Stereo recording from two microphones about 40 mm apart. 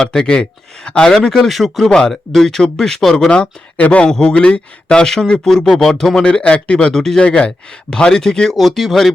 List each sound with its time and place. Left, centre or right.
0.0 s speech: centre
0.9 s speech: left
1.5 s speech: centre
1.9 s speech: centre
3.2 s speech: left
3.8 s a man's voice: left
4.2 s speech: left
5.0 s speech: centre
6.2 s speech: left
6.7 s speech: centre
7.2 s speech: left
8.5 s speech: centre